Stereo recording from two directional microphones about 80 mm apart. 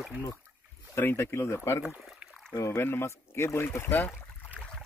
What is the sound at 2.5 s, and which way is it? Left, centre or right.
Speech, left.